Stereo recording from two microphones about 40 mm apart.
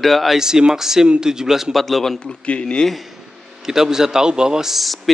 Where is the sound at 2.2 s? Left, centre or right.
Left.